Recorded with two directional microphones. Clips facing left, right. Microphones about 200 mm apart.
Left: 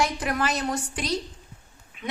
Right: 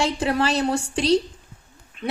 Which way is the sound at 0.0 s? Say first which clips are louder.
Right 4 dB; 30° right (ahead or behind).